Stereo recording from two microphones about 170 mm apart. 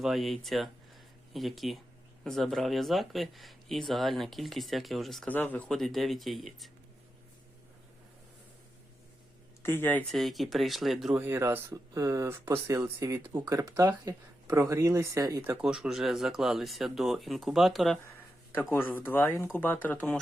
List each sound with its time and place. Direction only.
0.0 s speech: centre (ahead or behind)
9.6 s speech: 10° left (ahead or behind)
10.1 s speech: centre (ahead or behind)
11.2 s speech: 15° right (ahead or behind); by 18.0 s centre (ahead or behind)
18.7 s speech: 10° left (ahead or behind)